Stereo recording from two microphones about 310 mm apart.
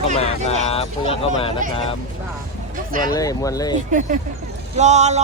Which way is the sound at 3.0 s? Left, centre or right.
Centre.